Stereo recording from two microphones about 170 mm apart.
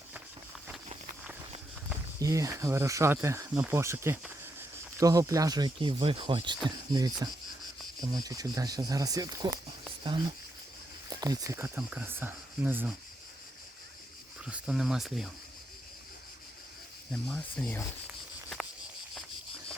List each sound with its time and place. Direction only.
1.9 s speech: 20° right (ahead or behind)
14.4 s speech: 5° right (ahead or behind)
17.1 s speech: 5° left (ahead or behind)